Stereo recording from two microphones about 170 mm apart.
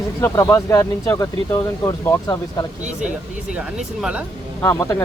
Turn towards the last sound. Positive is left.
turn(degrees=15)  # may be behind; listen again after turning